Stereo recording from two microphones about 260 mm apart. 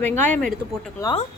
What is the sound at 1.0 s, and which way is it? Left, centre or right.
Speech, centre.